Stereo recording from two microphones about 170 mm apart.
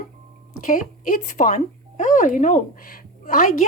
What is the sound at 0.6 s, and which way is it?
Speech, 50° left (ahead or behind).